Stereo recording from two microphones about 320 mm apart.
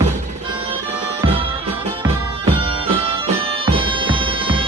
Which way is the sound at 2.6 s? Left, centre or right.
Centre.